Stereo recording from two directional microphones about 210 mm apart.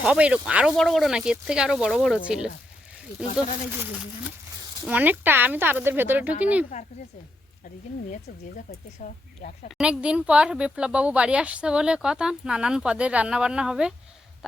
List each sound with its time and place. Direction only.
0.0 s speech: 5° right (ahead or behind)
4.9 s speech: 10° right (ahead or behind)
8.7 s speech: 40° left (ahead or behind)
9.7 s speech: 5° right (ahead or behind)